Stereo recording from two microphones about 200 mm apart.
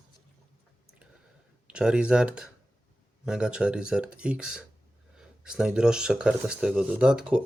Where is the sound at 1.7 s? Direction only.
5° right (ahead or behind).